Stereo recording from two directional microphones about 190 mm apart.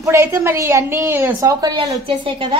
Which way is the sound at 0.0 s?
15° right (ahead or behind).